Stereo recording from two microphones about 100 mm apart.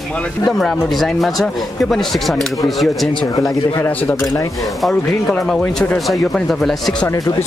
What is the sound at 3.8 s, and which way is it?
Speech, 15° left (ahead or behind).